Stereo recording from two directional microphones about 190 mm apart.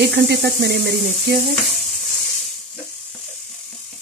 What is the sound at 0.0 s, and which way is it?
Speech, 60° right (ahead or behind).